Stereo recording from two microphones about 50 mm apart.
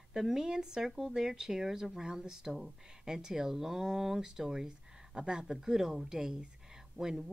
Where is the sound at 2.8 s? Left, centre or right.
Centre.